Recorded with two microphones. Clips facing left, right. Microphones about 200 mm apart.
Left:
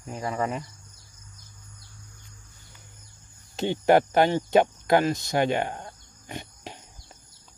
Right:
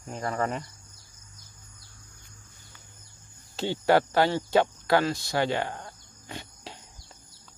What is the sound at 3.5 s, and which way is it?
Speech, 20° left (ahead or behind).